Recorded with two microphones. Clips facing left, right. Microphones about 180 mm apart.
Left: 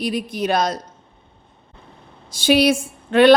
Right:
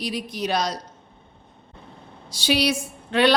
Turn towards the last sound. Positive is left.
turn(degrees=50)  # may be behind; listen again after turning